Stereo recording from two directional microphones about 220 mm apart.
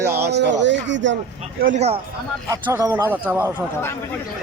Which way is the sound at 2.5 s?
15° right (ahead or behind).